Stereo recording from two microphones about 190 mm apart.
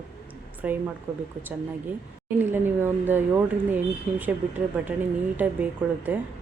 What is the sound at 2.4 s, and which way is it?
A woman's voice, 10° right (ahead or behind).